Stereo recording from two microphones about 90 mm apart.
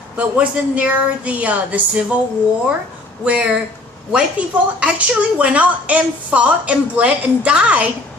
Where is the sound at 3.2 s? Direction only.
15° right (ahead or behind).